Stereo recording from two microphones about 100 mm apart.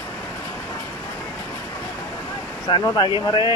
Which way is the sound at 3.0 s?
50° left (ahead or behind).